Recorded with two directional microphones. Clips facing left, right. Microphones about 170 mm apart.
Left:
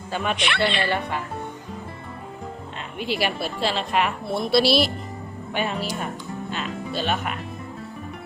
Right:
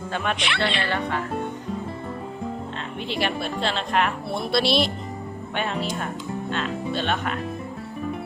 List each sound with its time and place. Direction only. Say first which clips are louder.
0.1 s speech: left 1 dB; 5° left (ahead or behind)
0.3 s speech: left 2 dB; 55° left (ahead or behind)
0.8 s speech: left 1 dB; 10° left (ahead or behind)
3.0 s a woman's voice: left 1 dB; 5° left (ahead or behind)